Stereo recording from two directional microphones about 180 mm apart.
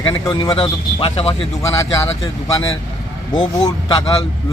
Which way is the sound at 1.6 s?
15° left (ahead or behind).